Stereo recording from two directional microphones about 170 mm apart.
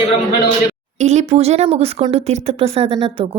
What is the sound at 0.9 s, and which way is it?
A woman's voice, 40° right (ahead or behind).